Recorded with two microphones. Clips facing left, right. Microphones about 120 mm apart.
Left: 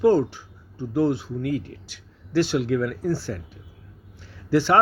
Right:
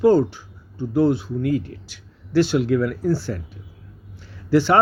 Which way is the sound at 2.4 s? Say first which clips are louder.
Right 4 dB; 25° right (ahead or behind).